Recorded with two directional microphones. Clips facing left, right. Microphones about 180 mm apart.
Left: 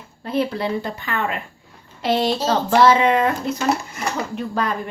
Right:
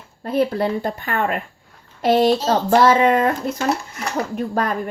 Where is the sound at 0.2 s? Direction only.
45° right (ahead or behind).